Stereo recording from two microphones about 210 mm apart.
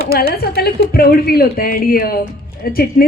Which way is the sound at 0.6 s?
45° left (ahead or behind).